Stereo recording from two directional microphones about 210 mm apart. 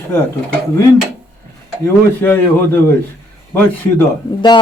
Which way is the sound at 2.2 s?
10° left (ahead or behind).